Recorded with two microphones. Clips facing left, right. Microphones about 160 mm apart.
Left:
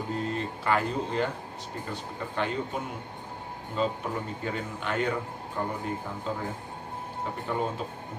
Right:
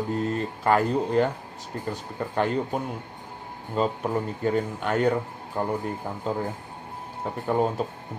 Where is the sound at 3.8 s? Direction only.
45° right (ahead or behind).